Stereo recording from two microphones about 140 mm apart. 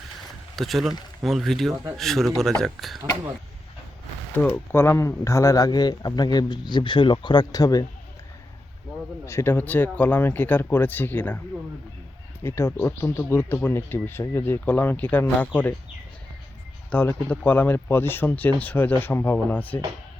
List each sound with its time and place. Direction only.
0.5 s speech: centre (ahead or behind)
4.4 s speech: 15° left (ahead or behind)
9.2 s speech: 20° left (ahead or behind)
12.4 s speech: 20° left (ahead or behind)
16.9 s speech: 15° left (ahead or behind)